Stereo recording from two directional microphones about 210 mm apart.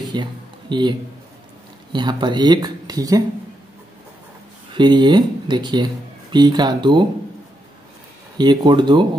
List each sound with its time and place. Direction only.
0.1 s speech: 20° right (ahead or behind)
4.7 s speech: 20° right (ahead or behind)
8.4 s speech: 20° right (ahead or behind)